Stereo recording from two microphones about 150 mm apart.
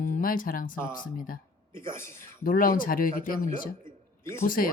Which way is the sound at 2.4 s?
70° left (ahead or behind).